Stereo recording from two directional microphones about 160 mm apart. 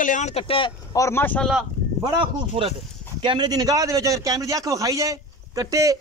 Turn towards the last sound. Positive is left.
turn(degrees=-20)  # may be behind; listen again after turning